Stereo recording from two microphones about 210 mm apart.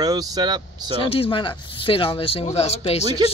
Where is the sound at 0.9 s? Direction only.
25° left (ahead or behind).